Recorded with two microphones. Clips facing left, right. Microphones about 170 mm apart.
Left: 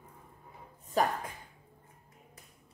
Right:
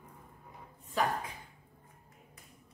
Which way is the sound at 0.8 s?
40° left (ahead or behind).